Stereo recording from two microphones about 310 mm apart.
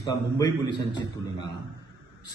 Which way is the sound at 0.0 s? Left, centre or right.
Centre.